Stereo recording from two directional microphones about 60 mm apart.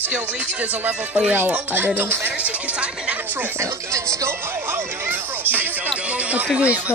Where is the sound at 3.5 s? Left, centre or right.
Right.